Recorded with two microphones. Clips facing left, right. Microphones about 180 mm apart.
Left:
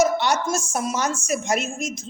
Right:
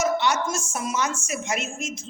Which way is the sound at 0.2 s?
40° left (ahead or behind).